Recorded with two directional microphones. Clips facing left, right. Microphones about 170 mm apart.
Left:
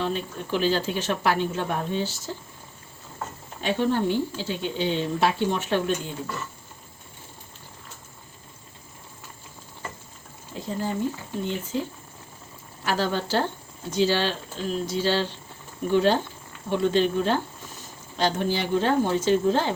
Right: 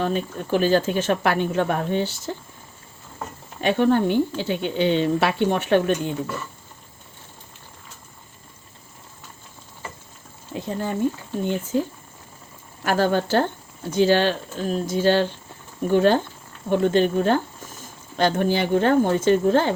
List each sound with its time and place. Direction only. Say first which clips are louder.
0.0 s speech: right 4 dB; 50° right (ahead or behind)
3.6 s a woman's voice: right 5 dB; 60° right (ahead or behind)
11.4 s speech: right 6 dB; 50° right (ahead or behind)
12.8 s a woman's voice: right 5 dB; 50° right (ahead or behind)